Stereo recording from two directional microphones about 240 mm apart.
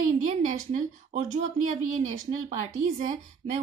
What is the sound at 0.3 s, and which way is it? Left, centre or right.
Speech, right.